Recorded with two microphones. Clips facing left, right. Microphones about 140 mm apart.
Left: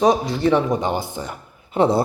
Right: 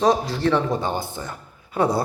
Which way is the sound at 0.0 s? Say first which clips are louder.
Left 2 dB; 5° left (ahead or behind).